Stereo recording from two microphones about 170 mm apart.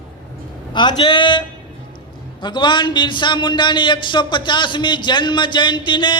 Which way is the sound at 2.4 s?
25° left (ahead or behind).